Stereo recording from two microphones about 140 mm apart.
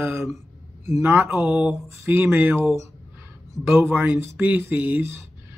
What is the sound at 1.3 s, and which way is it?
Speech, 5° right (ahead or behind).